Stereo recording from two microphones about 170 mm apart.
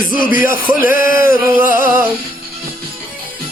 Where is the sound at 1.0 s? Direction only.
55° left (ahead or behind).